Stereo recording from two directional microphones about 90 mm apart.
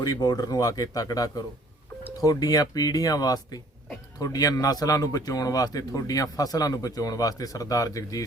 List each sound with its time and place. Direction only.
0.0 s speech: 45° left (ahead or behind)